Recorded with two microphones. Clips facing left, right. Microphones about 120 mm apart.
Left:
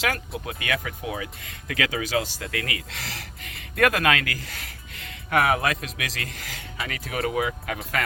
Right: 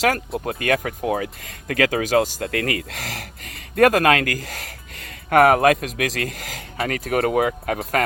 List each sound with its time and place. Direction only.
0.3 s speech: 45° right (ahead or behind)